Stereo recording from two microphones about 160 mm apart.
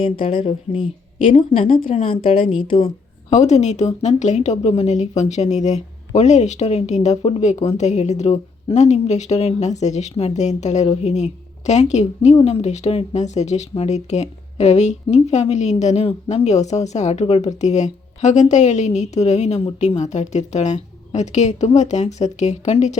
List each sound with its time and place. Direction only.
0.0 s a woman's voice: 35° left (ahead or behind)
2.8 s a woman's voice: 45° left (ahead or behind)